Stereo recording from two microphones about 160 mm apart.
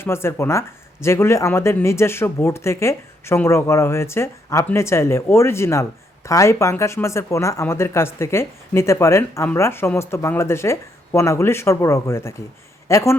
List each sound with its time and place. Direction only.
0.0 s speech: 15° left (ahead or behind)